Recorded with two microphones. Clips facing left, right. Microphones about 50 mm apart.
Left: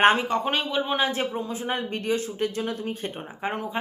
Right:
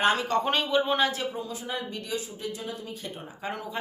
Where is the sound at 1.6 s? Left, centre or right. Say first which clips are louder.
Left 7 dB; left.